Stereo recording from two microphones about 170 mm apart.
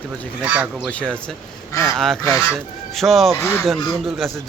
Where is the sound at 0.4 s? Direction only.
10° right (ahead or behind).